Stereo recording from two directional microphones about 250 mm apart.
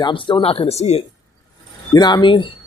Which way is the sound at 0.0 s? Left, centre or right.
Centre.